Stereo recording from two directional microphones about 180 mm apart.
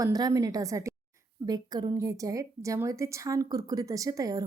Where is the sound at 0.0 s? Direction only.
20° right (ahead or behind).